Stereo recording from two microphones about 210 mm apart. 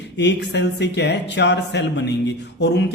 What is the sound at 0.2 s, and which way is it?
Speech, 55° left (ahead or behind).